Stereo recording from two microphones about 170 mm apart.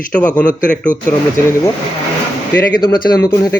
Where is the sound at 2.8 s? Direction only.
20° left (ahead or behind).